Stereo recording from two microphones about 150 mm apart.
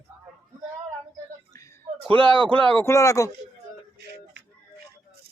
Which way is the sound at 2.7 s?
15° left (ahead or behind).